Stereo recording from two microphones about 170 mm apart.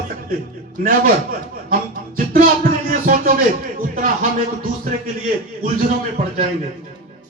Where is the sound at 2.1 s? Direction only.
55° right (ahead or behind).